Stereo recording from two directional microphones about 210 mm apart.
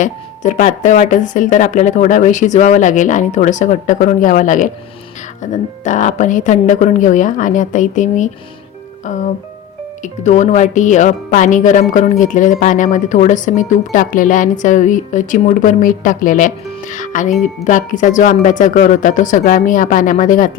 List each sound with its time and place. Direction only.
0.0 s speech: 35° left (ahead or behind)